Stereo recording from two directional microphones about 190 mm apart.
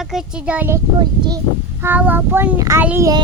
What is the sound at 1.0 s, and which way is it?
Speech, 20° right (ahead or behind).